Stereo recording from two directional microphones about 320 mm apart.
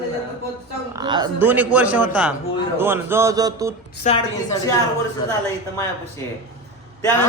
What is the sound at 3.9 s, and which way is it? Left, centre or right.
Speech, left.